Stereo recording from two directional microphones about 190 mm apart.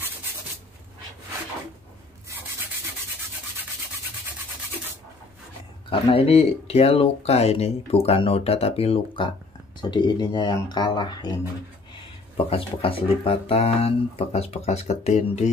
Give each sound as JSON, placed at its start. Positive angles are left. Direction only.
{"t": 5.9, "sound": "speech", "side_deg": 30}
{"t": 12.4, "sound": "speech", "side_deg": 30}